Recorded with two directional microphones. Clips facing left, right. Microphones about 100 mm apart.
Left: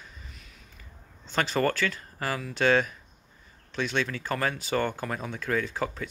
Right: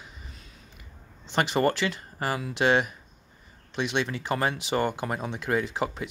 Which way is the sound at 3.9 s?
15° right (ahead or behind).